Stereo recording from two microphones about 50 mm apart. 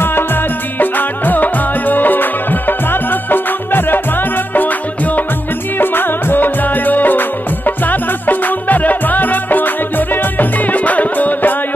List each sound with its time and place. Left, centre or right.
0.0 s music: left
5.8 s music: left